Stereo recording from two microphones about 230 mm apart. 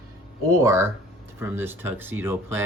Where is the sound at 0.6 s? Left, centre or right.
Centre.